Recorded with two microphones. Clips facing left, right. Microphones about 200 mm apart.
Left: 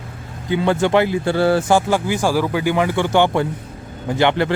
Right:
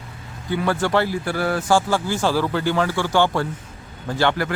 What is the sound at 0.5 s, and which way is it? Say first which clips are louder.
Speech: left 4 dB; 20° left (ahead or behind).